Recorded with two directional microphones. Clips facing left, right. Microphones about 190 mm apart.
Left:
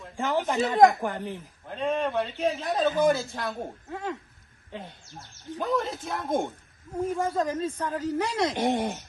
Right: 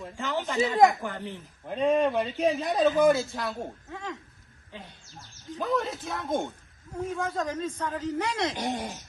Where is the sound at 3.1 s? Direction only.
Centre (ahead or behind).